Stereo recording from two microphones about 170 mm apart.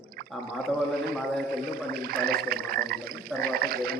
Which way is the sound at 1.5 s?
65° right (ahead or behind).